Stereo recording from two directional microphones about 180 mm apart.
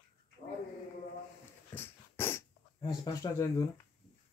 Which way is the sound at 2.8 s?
25° left (ahead or behind).